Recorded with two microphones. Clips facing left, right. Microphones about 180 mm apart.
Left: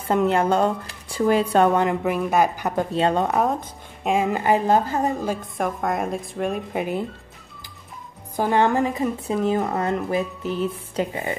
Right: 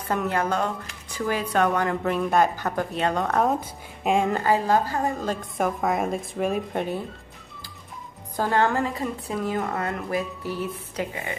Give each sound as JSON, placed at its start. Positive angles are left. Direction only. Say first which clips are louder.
{"t": 0.1, "sound": "a woman's voice", "louder": "left 6 dB", "side_deg": 25}
{"t": 1.9, "sound": "speech", "louder": "left 2 dB", "side_deg": 10}
{"t": 4.0, "sound": "speech", "louder": "left 1 dB", "side_deg": 0}
{"t": 4.3, "sound": "a woman's voice", "louder": "left 2 dB", "side_deg": 20}
{"t": 5.2, "sound": "a woman's voice", "louder": "left 1 dB", "side_deg": 10}
{"t": 8.4, "sound": "a woman's voice", "louder": "left 3 dB", "side_deg": 15}